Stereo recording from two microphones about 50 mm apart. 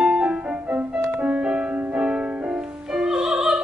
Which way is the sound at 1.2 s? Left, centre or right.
Right.